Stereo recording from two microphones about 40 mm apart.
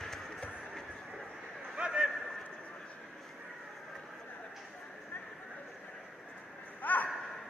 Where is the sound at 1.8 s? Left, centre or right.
Right.